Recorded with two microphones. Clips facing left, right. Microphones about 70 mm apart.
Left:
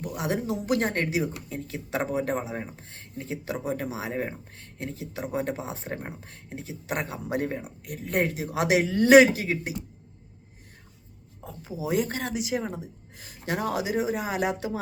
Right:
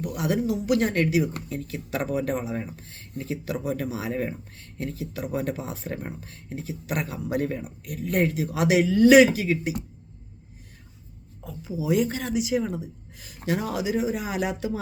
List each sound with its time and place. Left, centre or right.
0.0 s speech: left
11.4 s speech: left